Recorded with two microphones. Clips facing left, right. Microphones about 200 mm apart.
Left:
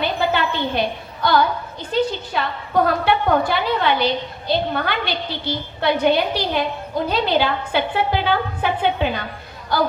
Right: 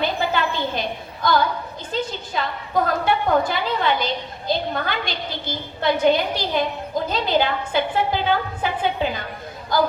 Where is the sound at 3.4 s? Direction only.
60° left (ahead or behind).